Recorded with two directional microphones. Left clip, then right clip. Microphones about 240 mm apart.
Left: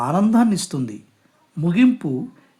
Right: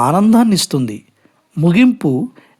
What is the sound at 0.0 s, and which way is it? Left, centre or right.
Speech, right.